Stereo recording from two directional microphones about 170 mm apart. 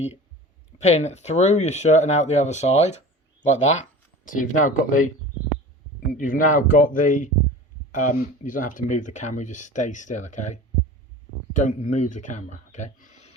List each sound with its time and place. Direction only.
0.8 s speech: 40° left (ahead or behind)